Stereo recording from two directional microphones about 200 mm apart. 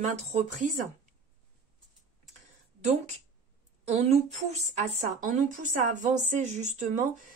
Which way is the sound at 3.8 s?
35° right (ahead or behind).